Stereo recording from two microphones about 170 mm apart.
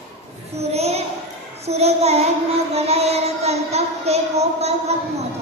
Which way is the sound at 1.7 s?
40° right (ahead or behind).